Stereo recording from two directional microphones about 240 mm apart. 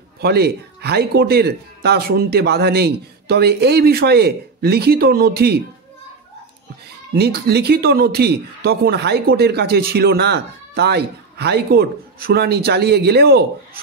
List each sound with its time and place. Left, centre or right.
0.2 s a man's voice: right
7.2 s a man's voice: right